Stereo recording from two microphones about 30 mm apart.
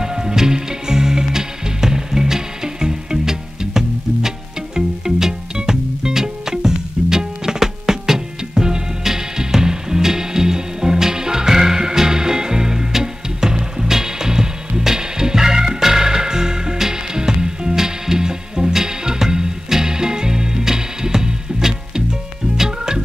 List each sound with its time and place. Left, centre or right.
0.0 s music: right